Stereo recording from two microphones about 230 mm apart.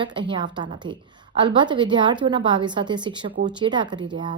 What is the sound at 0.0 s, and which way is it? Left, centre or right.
A woman's voice, right.